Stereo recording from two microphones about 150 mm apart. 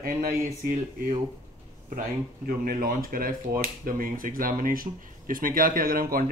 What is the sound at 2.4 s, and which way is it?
Speech, 75° right (ahead or behind).